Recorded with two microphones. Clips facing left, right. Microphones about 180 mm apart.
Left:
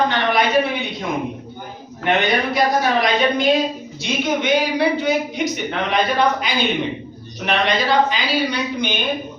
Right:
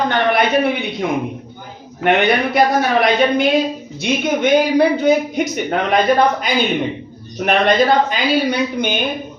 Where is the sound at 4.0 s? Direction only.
45° right (ahead or behind).